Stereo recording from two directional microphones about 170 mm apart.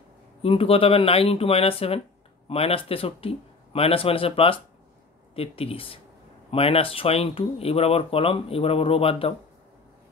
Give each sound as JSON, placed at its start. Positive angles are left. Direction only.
{"t": 0.4, "sound": "speech", "side_deg": 35}